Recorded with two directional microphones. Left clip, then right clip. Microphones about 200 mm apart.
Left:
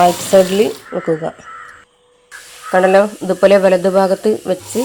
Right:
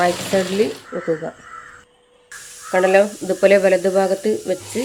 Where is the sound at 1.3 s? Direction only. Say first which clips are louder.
Left 7 dB; 20° left (ahead or behind).